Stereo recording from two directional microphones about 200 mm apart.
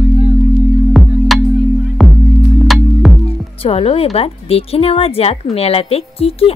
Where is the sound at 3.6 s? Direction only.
30° left (ahead or behind).